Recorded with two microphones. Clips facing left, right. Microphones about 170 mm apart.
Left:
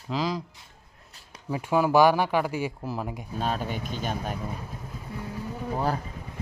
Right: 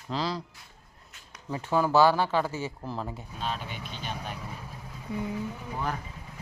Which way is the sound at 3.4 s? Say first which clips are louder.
Left 6 dB; 45° left (ahead or behind).